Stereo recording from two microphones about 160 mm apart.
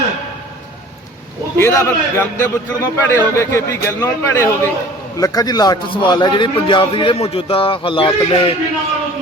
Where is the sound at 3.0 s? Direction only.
15° left (ahead or behind); by 8.6 s 35° left (ahead or behind).